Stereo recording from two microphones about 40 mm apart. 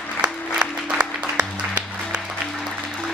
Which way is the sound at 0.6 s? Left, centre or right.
Right.